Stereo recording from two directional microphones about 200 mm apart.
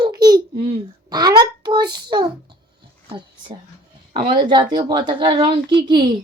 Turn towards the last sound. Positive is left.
turn(degrees=-20)  # may be behind; listen again after turning